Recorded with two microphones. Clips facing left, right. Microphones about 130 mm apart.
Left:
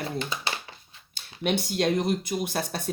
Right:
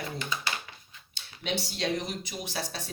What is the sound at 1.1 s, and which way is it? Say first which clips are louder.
Speech: left 6 dB; 55° left (ahead or behind).